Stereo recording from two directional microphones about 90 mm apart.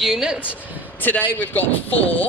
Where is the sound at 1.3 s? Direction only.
20° left (ahead or behind).